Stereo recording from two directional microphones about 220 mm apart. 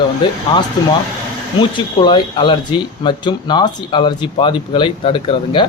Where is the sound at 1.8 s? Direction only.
20° left (ahead or behind).